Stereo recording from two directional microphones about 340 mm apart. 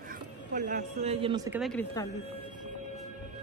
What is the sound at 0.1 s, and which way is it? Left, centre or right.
Speech, right.